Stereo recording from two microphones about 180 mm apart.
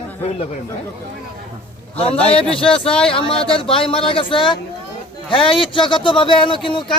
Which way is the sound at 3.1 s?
30° left (ahead or behind).